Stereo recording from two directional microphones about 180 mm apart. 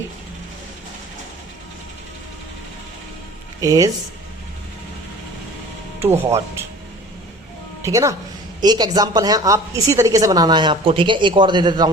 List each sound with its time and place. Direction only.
3.6 s a woman's voice: 20° right (ahead or behind)
6.0 s speech: 10° right (ahead or behind)
7.8 s a woman's voice: 15° right (ahead or behind)